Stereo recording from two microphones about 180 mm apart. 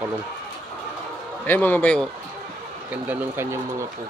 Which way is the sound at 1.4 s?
10° left (ahead or behind).